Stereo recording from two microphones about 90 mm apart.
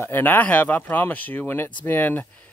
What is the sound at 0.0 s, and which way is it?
Speech, 20° left (ahead or behind).